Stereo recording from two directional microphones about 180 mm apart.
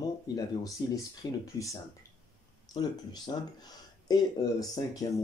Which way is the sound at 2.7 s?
25° left (ahead or behind).